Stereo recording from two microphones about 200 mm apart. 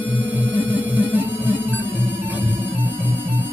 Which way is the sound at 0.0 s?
10° right (ahead or behind).